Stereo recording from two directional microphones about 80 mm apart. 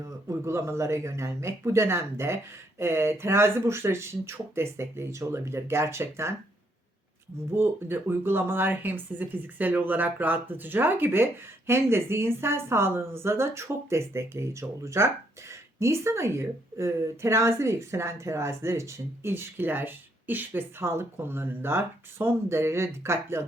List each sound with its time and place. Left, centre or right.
0.0 s speech: right
7.5 s speech: right